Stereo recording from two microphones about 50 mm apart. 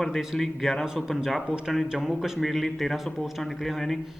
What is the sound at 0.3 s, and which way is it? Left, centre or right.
Speech, centre.